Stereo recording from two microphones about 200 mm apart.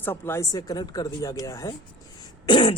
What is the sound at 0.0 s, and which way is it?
Speech, 10° left (ahead or behind).